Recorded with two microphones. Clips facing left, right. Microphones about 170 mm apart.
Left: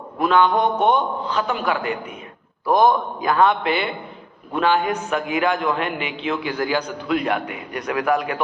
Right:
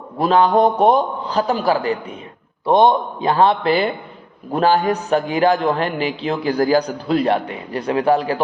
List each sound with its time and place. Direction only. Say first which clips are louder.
0.2 s a man's voice: right 3 dB; 35° right (ahead or behind)